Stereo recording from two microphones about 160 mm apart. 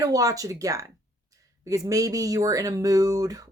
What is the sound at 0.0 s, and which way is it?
Speech, 20° right (ahead or behind).